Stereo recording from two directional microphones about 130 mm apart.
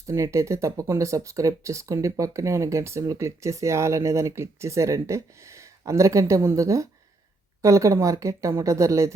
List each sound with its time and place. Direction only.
0.1 s speech: 25° right (ahead or behind)